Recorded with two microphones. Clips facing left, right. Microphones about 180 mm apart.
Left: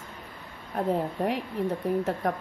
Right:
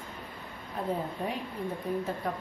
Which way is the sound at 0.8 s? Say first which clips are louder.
Left 6 dB; 70° left (ahead or behind).